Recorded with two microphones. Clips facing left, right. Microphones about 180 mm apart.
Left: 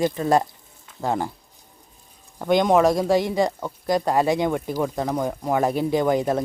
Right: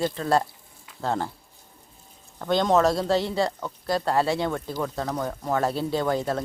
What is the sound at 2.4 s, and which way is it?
Speech, 15° left (ahead or behind).